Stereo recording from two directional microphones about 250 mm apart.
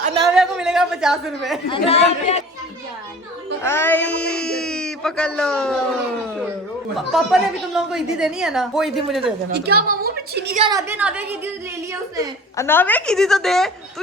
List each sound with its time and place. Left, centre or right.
0.1 s a sound: centre
0.3 s a woman's voice: centre
1.7 s speech: left
3.6 s a man's voice: centre
6.9 s speech: centre
9.5 s a woman's voice: right
10.6 s a woman's voice: centre
12.5 s speech: centre